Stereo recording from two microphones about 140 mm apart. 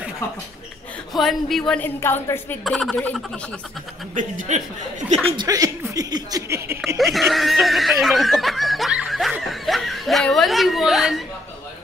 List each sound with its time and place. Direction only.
1.1 s speech: centre (ahead or behind)
1.8 s a woman's voice: 15° left (ahead or behind)
2.6 s speech: centre (ahead or behind)
4.1 s speech: 65° right (ahead or behind)
5.3 s speech: 30° right (ahead or behind)
7.0 s snicker: centre (ahead or behind)